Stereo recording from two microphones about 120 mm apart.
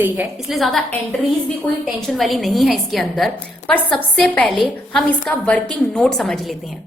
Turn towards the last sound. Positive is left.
turn(degrees=5)  # may be behind; listen again after turning